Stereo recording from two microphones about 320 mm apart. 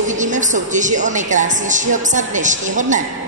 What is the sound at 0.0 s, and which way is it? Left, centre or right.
A woman's voice, right.